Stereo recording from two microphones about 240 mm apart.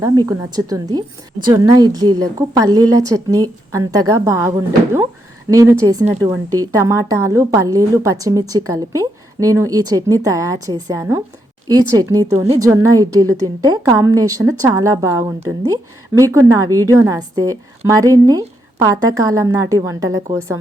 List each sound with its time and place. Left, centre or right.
0.0 s a woman's voice: centre